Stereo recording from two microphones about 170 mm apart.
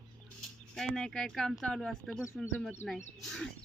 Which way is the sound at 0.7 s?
5° left (ahead or behind).